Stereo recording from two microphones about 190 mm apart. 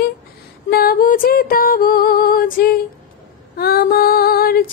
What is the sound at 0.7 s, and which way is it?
Female singing, 50° left (ahead or behind).